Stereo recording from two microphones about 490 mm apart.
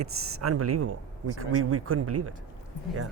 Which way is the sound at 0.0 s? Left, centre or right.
Right.